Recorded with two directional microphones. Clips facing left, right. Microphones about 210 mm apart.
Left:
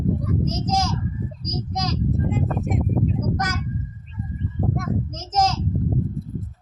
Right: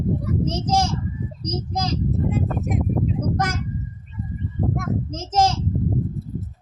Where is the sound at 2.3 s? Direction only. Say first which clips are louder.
Even; centre (ahead or behind).